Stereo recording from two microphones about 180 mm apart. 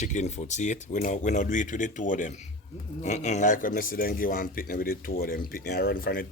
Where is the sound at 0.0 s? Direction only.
40° left (ahead or behind).